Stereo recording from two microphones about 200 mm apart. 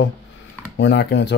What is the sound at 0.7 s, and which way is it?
Speech, 60° left (ahead or behind).